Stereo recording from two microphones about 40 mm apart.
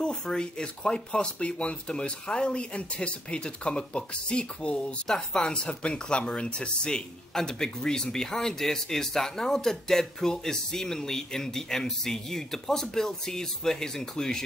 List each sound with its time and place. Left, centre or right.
0.0 s speech: left
5.0 s speech: centre
5.5 s speech: left